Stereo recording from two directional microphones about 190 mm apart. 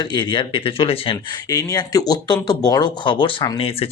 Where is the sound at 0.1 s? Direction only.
25° left (ahead or behind).